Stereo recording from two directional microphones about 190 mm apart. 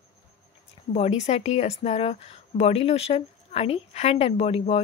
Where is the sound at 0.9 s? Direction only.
35° left (ahead or behind).